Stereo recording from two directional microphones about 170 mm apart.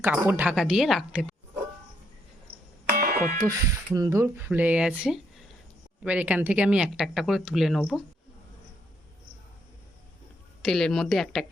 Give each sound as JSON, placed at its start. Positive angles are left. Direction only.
{"t": 0.0, "sound": "speech", "side_deg": -10}
{"t": 2.5, "sound": "music", "side_deg": -35}
{"t": 2.8, "sound": "music", "side_deg": -65}
{"t": 3.9, "sound": "speech", "side_deg": -20}
{"t": 10.6, "sound": "speech", "side_deg": 5}